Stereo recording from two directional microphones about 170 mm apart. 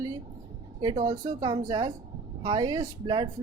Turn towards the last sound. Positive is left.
turn(degrees=-30)  # may be behind; listen again after turning